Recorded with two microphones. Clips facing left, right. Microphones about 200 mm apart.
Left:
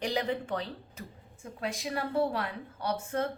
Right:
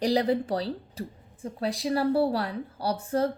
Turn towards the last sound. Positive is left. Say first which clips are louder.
# right 5 dB
turn(degrees=-35)  # may be behind; listen again after turning